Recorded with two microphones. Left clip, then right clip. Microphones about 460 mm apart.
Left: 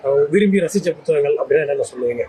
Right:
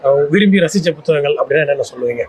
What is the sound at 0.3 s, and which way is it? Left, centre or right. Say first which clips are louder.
Speech: right 3 dB; right.